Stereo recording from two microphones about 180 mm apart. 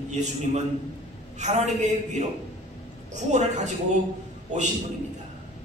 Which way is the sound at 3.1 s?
40° right (ahead or behind).